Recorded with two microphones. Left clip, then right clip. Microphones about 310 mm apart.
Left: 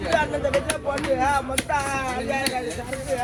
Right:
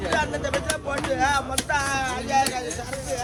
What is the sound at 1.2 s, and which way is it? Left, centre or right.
Speech, left.